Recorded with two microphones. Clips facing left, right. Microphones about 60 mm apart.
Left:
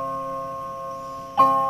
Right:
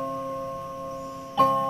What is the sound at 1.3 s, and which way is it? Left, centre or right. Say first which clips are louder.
Music: left 4 dB; left.